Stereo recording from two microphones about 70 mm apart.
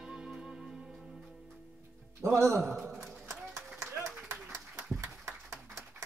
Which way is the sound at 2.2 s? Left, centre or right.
Right.